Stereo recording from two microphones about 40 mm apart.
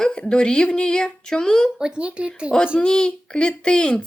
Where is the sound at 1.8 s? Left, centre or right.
Right.